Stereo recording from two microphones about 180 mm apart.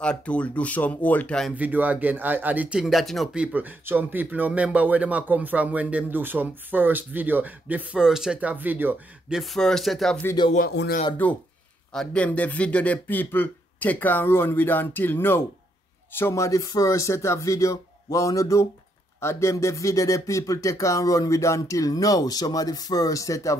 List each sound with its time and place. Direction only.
0.0 s speech: 5° left (ahead or behind)
1.5 s speech: 10° right (ahead or behind)
9.4 s speech: centre (ahead or behind)
10.2 s speech: 25° left (ahead or behind)
10.7 s speech: 65° left (ahead or behind)
11.9 s speech: 5° left (ahead or behind)